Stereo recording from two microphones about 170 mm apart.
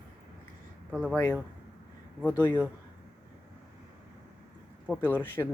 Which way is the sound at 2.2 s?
10° left (ahead or behind).